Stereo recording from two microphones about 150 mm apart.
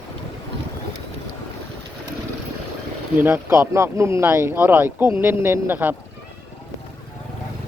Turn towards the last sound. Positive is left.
turn(degrees=-10)  # may be behind; listen again after turning